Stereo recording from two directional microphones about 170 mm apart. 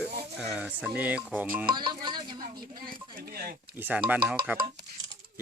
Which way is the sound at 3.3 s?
65° right (ahead or behind).